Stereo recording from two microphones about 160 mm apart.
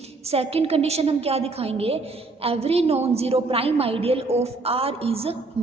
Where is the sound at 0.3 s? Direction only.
40° right (ahead or behind).